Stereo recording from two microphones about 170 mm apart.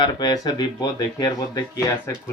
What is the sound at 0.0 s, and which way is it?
Speech, 25° left (ahead or behind).